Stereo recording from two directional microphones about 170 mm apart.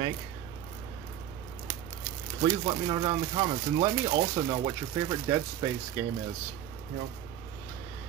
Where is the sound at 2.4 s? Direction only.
30° right (ahead or behind).